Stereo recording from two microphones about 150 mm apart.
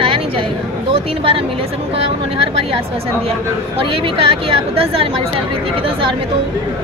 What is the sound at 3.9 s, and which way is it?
Speech, 35° right (ahead or behind).